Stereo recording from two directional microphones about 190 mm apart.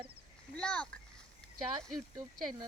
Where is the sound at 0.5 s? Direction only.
5° left (ahead or behind).